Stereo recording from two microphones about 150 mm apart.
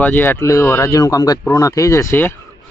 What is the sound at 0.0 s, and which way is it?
A man's voice, 10° left (ahead or behind).